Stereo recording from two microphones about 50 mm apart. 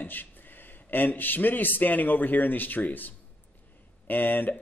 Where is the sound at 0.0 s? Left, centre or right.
Left.